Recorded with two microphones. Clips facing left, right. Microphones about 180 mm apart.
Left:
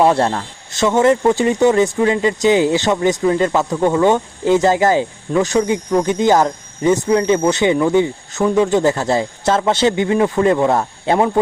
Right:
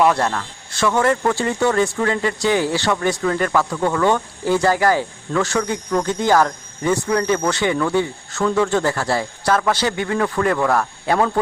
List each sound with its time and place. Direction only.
0.0 s speech: 30° left (ahead or behind)